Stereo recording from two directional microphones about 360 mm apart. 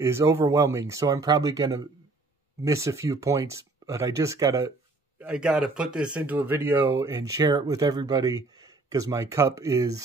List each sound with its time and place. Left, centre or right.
0.0 s speech: centre